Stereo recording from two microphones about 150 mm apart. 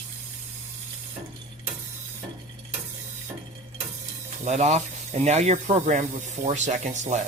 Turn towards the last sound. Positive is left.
turn(degrees=-50)  # may be behind; listen again after turning